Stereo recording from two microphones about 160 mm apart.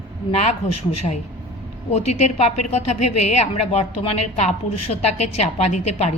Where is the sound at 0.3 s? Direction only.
45° left (ahead or behind).